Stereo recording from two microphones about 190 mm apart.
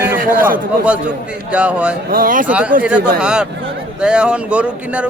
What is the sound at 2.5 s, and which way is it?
A man's voice, 5° right (ahead or behind).